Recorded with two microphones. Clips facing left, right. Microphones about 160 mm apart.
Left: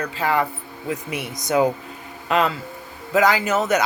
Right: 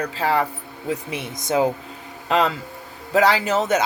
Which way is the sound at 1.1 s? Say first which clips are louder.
Left 3 dB; 25° right (ahead or behind).